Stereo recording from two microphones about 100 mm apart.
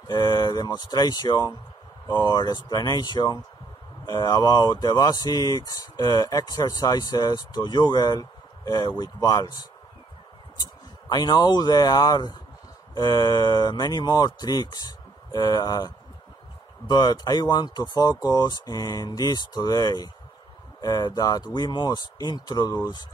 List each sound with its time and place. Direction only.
0.1 s speech: 40° left (ahead or behind)